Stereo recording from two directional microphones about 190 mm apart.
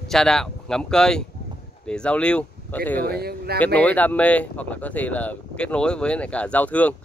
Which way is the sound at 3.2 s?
55° right (ahead or behind).